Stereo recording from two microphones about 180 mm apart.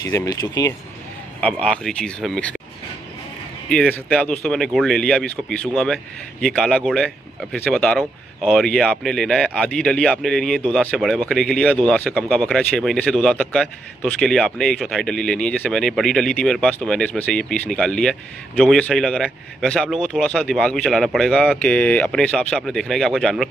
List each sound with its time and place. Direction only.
0.0 s speech: 20° left (ahead or behind)
1.4 s speech: 5° left (ahead or behind)
3.7 s speech: 5° left (ahead or behind)